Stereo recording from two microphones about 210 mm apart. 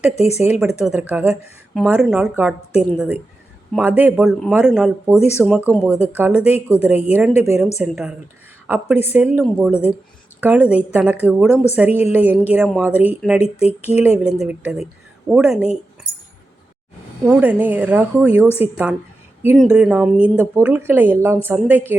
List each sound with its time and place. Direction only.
0.2 s speech: 30° left (ahead or behind)
0.6 s a woman's voice: 5° right (ahead or behind)
17.2 s speech: 5° right (ahead or behind)
19.5 s a woman's voice: 5° right (ahead or behind)